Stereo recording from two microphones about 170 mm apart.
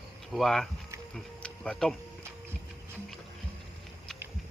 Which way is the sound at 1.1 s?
5° left (ahead or behind).